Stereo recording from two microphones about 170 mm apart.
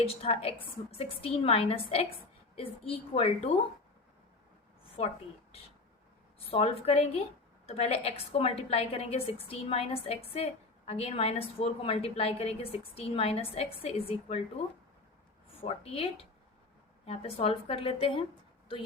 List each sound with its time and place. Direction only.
0.0 s a woman's voice: 35° left (ahead or behind)
4.9 s a woman's voice: 40° left (ahead or behind)
15.6 s a woman's voice: 35° left (ahead or behind)